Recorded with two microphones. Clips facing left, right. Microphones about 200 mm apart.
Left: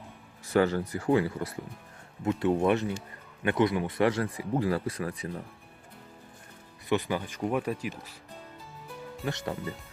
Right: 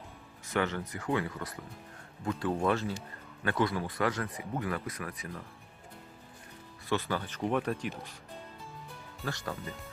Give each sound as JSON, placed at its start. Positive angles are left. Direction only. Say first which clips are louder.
{"t": 0.5, "sound": "speech", "louder": "left 7 dB", "side_deg": 35}
{"t": 6.8, "sound": "speech", "louder": "left 4 dB", "side_deg": 15}
{"t": 9.2, "sound": "speech", "louder": "left 4 dB", "side_deg": 25}